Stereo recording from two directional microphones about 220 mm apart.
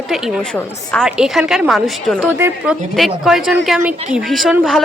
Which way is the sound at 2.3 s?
10° right (ahead or behind).